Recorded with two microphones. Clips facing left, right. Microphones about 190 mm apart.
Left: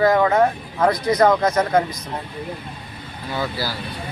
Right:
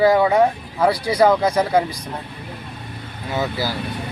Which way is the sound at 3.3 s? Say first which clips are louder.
Right 2 dB; 20° right (ahead or behind).